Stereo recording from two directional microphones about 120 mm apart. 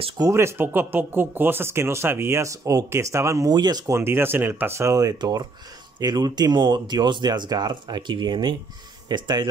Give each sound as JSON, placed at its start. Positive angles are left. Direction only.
{"t": 0.2, "sound": "speech", "side_deg": -25}
{"t": 3.9, "sound": "speech", "side_deg": -20}